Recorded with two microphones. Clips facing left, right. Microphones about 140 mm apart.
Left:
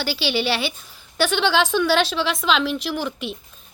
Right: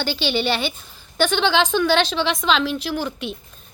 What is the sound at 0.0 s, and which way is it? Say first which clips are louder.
A woman's voice: right 1 dB; 5° left (ahead or behind).